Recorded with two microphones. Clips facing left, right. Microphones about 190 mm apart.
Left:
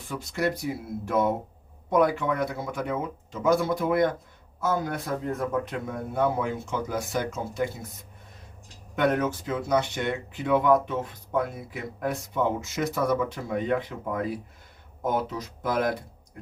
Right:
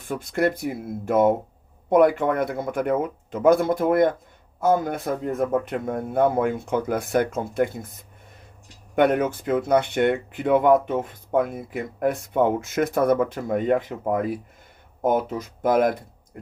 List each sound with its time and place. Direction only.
0.1 s speech: 55° right (ahead or behind)
9.0 s speech: 55° right (ahead or behind)